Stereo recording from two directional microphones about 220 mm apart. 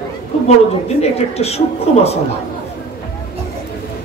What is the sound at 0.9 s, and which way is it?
A man's voice, 30° left (ahead or behind).